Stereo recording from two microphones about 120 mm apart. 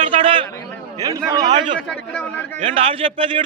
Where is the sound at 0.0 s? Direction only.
45° right (ahead or behind).